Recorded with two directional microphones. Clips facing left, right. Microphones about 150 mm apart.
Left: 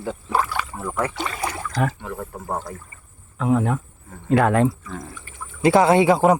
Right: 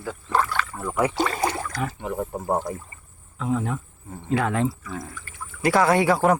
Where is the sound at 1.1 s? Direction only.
35° right (ahead or behind).